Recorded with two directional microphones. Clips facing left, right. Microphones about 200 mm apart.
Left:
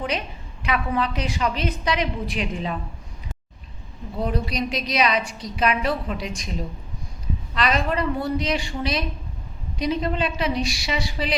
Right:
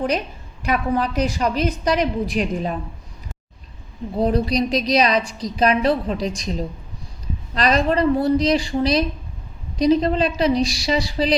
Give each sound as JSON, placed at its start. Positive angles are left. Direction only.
{"t": 0.6, "sound": "a woman's voice", "side_deg": -40}
{"t": 4.2, "sound": "a woman's voice", "side_deg": -35}